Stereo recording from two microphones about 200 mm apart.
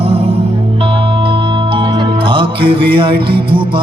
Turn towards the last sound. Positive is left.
turn(degrees=-25)  # may be behind; listen again after turning